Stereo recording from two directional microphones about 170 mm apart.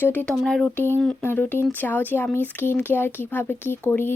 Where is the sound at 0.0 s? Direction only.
10° left (ahead or behind).